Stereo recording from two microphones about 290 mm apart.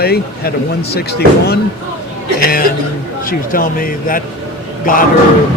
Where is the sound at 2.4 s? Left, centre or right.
Left.